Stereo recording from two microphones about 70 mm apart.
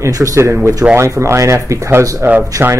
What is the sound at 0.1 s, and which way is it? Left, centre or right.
Speech, right.